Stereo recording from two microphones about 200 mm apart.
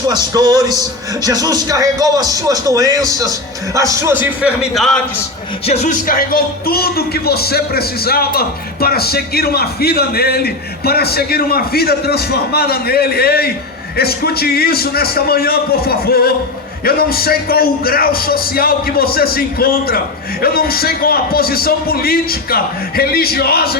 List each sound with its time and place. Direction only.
0.1 s speech: 20° right (ahead or behind); by 4.9 s centre (ahead or behind)
5.6 s speech: 35° left (ahead or behind); by 23.7 s 50° left (ahead or behind)